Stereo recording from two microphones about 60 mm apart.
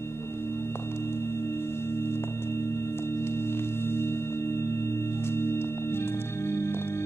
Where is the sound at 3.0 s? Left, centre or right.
Left.